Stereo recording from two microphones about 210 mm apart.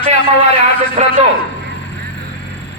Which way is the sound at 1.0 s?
35° right (ahead or behind).